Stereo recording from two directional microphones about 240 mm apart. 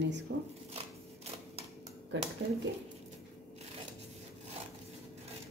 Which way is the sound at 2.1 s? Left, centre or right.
Right.